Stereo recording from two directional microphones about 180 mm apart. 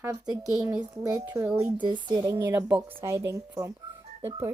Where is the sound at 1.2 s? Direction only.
15° right (ahead or behind).